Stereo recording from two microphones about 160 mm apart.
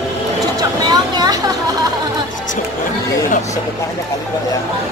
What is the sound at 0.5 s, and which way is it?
Speech, 25° right (ahead or behind).